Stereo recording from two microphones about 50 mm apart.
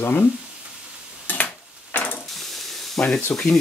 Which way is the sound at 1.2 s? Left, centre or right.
Left.